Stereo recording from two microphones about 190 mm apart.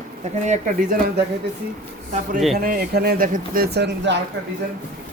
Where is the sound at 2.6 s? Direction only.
50° right (ahead or behind); by 4.1 s 65° right (ahead or behind).